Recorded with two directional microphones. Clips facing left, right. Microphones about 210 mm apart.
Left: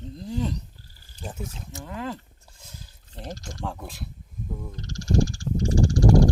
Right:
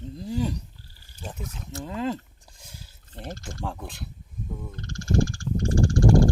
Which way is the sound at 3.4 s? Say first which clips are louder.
Right 1 dB; centre (ahead or behind).